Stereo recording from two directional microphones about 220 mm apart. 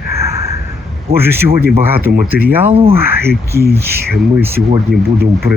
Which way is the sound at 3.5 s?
45° right (ahead or behind).